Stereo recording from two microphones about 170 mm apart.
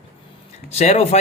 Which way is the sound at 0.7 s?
40° left (ahead or behind).